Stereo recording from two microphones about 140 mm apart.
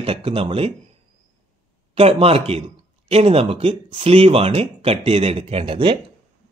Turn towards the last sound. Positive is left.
turn(degrees=-40)  # may be behind; listen again after turning